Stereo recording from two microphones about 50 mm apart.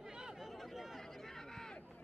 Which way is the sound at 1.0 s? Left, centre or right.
Centre.